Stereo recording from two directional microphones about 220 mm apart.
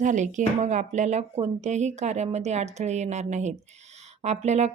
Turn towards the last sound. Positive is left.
turn(degrees=-30)  # may be behind; listen again after turning